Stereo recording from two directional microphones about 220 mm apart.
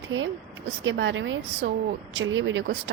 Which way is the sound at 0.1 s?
60° right (ahead or behind).